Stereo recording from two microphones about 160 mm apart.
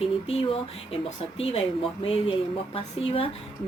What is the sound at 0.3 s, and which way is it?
Speech, 40° left (ahead or behind).